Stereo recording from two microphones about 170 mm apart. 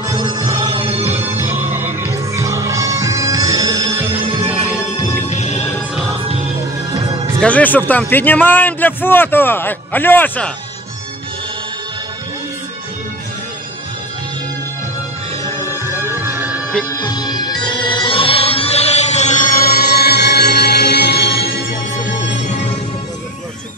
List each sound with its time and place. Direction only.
0.0 s music: 25° right (ahead or behind)
1.3 s music: 10° right (ahead or behind)
3.9 s music: 35° right (ahead or behind)
5.3 s music: 40° left (ahead or behind)
6.9 s music: 25° right (ahead or behind)
7.3 s a man's voice: 5° left (ahead or behind)
15.8 s music: 15° right (ahead or behind)
16.9 s music: 25° left (ahead or behind); by 21.7 s 70° left (ahead or behind)